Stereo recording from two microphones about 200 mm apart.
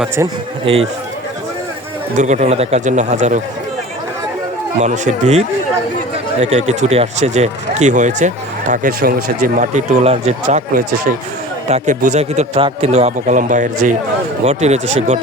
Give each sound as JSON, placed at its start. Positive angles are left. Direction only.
{"t": 0.6, "sound": "speech", "side_deg": -30}
{"t": 2.1, "sound": "speech", "side_deg": -35}
{"t": 4.8, "sound": "speech", "side_deg": -35}